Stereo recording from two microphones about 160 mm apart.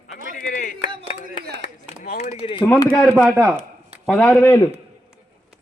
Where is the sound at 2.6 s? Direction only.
10° left (ahead or behind); by 3.5 s 10° right (ahead or behind).